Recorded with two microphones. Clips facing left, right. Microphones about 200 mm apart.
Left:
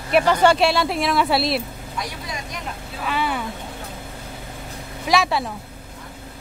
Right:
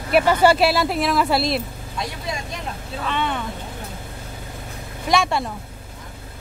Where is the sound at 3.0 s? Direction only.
5° left (ahead or behind).